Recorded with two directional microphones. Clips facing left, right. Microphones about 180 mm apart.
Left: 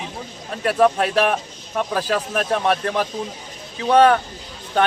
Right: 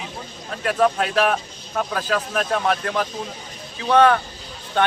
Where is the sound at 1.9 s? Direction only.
35° left (ahead or behind).